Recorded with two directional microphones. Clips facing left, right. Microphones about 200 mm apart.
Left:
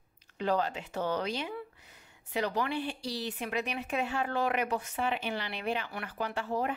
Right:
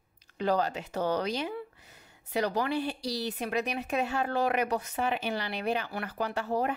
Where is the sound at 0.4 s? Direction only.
40° right (ahead or behind).